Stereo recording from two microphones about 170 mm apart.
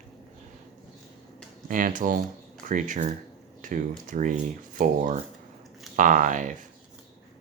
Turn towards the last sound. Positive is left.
turn(degrees=-50)  # may be behind; listen again after turning